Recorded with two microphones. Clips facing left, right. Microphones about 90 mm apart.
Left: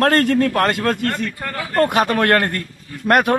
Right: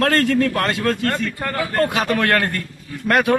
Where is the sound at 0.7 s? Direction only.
50° left (ahead or behind).